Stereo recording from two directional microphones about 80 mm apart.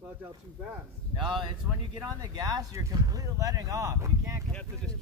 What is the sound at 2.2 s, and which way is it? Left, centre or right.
Speech, right.